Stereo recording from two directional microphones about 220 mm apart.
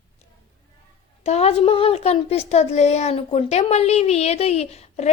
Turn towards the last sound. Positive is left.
turn(degrees=30)  # may be behind; listen again after turning